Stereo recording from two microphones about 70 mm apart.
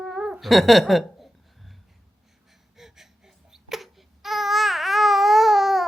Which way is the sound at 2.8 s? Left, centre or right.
Centre.